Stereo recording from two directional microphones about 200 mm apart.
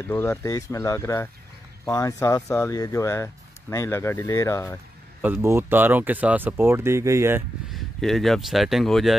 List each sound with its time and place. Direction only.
0.1 s speech: 15° left (ahead or behind)
5.2 s speech: 10° right (ahead or behind)
7.7 s speech: centre (ahead or behind)